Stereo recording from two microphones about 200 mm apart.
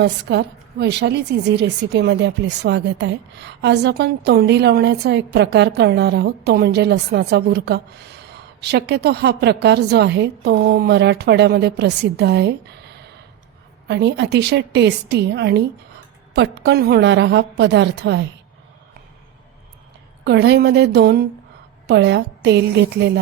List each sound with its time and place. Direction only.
0.0 s a woman's voice: 55° right (ahead or behind)
13.8 s a woman's voice: 60° right (ahead or behind)
20.2 s a woman's voice: 55° right (ahead or behind)